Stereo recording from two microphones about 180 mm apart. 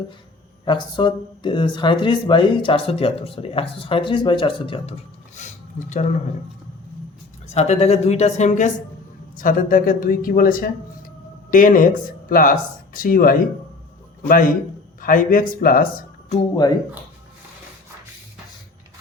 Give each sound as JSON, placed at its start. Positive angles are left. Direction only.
{"t": 0.6, "sound": "speech", "side_deg": 25}
{"t": 7.4, "sound": "a man's voice", "side_deg": 40}